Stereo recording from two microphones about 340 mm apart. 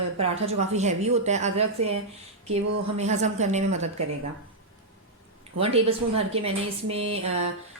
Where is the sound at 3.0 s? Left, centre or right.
Centre.